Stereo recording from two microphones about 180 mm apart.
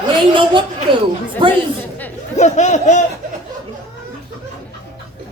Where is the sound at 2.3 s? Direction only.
40° left (ahead or behind).